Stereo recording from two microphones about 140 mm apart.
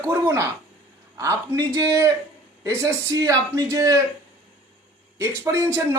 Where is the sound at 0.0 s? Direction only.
20° right (ahead or behind).